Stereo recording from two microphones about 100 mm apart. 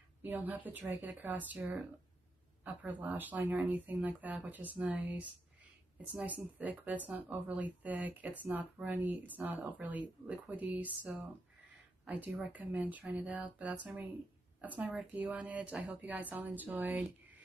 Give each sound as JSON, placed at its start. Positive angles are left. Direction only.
{"t": 0.2, "sound": "speech", "side_deg": -20}
{"t": 12.3, "sound": "speech", "side_deg": 0}
{"t": 12.5, "sound": "speech", "side_deg": -15}